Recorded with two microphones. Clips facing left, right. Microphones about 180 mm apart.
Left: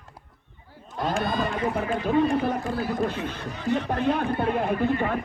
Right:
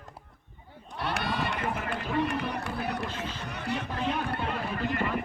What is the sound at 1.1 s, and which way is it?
Run, 70° right (ahead or behind).